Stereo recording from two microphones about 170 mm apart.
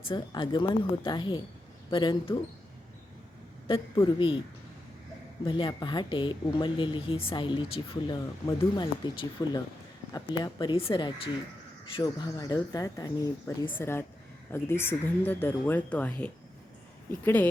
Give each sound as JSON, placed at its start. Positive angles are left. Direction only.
{"t": 0.1, "sound": "speech", "side_deg": 30}
{"t": 3.7, "sound": "a woman's voice", "side_deg": 30}
{"t": 5.5, "sound": "speech", "side_deg": 30}